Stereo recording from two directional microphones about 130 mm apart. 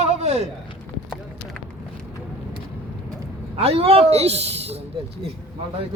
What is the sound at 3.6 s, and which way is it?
Speech, 50° right (ahead or behind).